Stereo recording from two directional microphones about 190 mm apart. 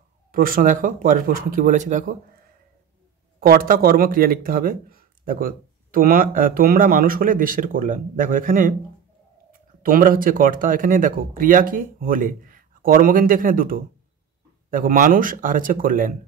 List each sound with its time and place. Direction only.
0.3 s speech: 45° right (ahead or behind)
3.3 s speech: 50° right (ahead or behind)
9.8 s speech: 45° right (ahead or behind)